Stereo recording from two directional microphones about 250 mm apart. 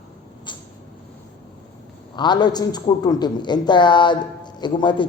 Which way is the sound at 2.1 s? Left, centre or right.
Centre.